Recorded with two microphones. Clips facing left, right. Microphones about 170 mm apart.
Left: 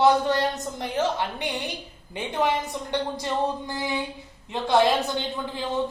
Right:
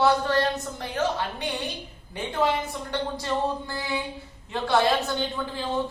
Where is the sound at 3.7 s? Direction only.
20° left (ahead or behind).